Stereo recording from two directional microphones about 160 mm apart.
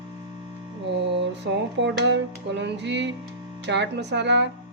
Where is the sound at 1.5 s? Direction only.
90° right.